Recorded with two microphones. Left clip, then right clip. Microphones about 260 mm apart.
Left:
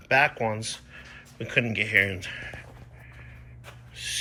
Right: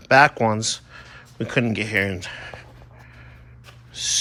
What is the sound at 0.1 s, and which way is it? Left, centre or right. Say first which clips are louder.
Speech: right 7 dB; centre.